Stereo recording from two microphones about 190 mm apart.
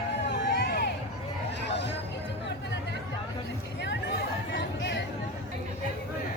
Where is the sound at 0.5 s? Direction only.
50° left (ahead or behind).